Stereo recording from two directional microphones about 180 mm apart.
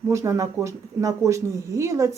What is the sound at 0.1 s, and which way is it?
Speech, 15° right (ahead or behind).